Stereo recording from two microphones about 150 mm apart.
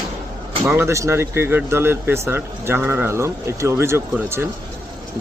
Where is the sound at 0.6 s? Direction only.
15° right (ahead or behind).